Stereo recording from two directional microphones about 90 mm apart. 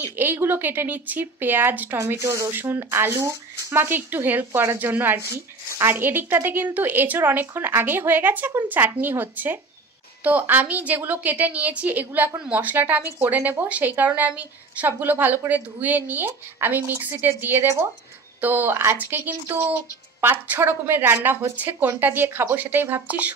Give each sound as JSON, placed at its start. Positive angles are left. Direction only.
{"t": 0.0, "sound": "a woman's voice", "side_deg": -20}